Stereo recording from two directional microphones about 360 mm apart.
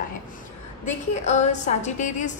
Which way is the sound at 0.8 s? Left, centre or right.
Centre.